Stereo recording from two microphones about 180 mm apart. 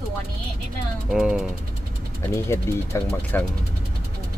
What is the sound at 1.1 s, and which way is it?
Speech, 5° right (ahead or behind).